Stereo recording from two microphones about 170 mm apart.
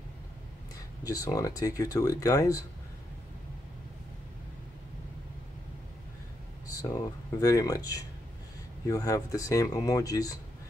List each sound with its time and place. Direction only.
1.0 s speech: 20° left (ahead or behind)
6.7 s speech: 20° left (ahead or behind)